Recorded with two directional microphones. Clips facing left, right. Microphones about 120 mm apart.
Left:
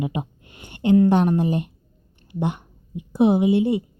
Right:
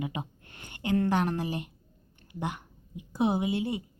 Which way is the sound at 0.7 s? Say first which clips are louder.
Left 10 dB; 25° left (ahead or behind).